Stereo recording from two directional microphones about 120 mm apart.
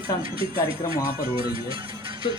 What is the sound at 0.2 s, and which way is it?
Speech, 50° right (ahead or behind).